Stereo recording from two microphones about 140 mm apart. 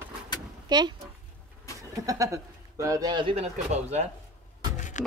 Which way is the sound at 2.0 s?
25° right (ahead or behind).